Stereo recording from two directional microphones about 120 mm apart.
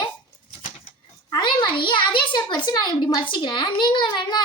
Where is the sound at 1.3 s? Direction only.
40° left (ahead or behind).